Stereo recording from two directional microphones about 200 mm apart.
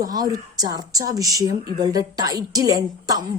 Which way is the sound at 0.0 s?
20° right (ahead or behind).